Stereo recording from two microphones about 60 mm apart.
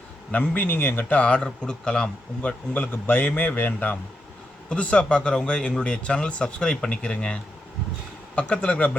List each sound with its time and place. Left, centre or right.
0.3 s a man's voice: left
1.2 s a man's voice: centre
4.7 s speech: centre
8.4 s speech: centre